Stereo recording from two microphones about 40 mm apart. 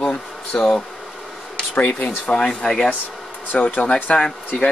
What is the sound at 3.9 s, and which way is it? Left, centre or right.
Speech, left.